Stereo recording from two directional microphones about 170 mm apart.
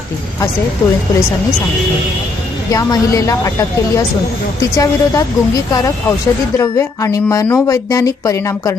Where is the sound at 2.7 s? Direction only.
20° left (ahead or behind).